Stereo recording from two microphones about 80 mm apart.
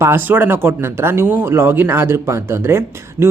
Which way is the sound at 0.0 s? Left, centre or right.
Right.